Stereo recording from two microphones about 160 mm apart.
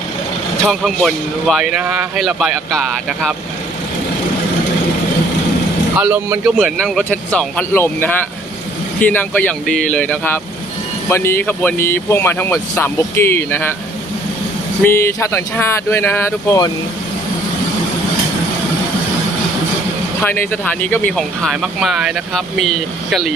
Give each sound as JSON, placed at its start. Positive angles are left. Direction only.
{"t": 0.7, "sound": "speech", "side_deg": 0}
{"t": 6.0, "sound": "speech", "side_deg": -10}
{"t": 6.4, "sound": "speech", "side_deg": -5}
{"t": 14.8, "sound": "speech", "side_deg": 15}
{"t": 20.2, "sound": "speech", "side_deg": 10}